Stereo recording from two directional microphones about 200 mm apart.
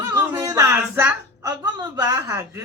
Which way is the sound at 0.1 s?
15° right (ahead or behind).